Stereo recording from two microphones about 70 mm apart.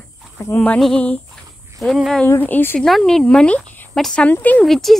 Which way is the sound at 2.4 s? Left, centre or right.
Left.